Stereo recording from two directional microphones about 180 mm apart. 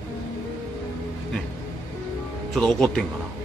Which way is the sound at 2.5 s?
5° left (ahead or behind).